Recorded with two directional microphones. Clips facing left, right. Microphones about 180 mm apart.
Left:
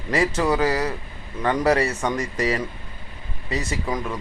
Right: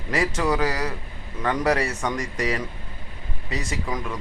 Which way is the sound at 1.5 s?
Centre (ahead or behind).